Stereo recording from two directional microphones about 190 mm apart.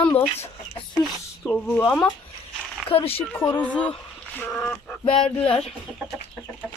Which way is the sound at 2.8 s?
30° left (ahead or behind).